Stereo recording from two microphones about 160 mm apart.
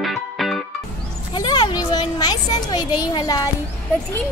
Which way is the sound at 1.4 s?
25° left (ahead or behind).